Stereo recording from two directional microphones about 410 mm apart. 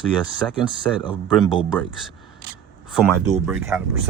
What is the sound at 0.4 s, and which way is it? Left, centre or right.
Speech, centre.